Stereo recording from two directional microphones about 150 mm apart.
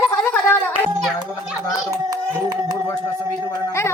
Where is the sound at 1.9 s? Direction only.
25° right (ahead or behind).